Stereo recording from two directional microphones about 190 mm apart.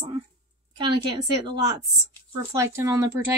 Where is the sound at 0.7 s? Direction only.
25° right (ahead or behind).